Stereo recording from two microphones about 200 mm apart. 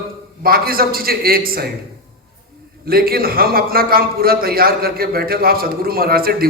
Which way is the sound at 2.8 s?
50° right (ahead or behind).